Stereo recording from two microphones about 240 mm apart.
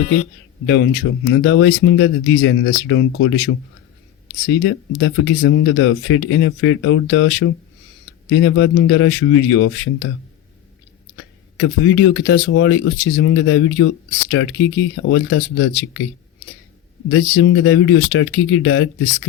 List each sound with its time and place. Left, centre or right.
0.0 s speech: left
0.7 s speech: left
11.2 s speech: left
17.3 s speech: left